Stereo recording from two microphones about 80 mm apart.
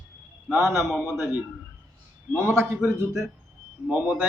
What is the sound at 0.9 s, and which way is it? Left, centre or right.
Speech, centre.